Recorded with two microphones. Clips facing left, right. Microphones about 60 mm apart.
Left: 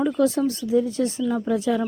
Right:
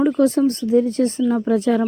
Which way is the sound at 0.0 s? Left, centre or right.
Right.